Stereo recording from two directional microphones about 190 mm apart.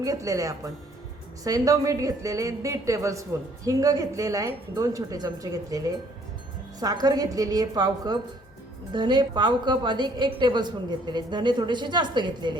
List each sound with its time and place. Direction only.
0.0 s a woman's voice: 15° right (ahead or behind)